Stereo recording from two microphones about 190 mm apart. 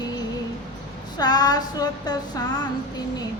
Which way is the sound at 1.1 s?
20° left (ahead or behind).